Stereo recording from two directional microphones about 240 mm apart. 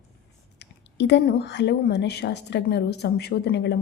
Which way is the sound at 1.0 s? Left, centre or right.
Left.